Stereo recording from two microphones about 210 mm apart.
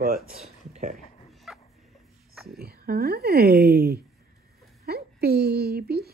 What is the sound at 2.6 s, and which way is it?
Speech, 45° right (ahead or behind).